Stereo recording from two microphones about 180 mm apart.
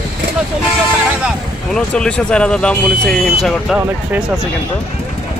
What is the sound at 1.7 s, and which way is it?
Speech, 5° left (ahead or behind).